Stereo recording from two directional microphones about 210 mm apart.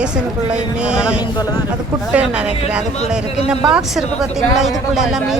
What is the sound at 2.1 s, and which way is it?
Speech, 5° right (ahead or behind).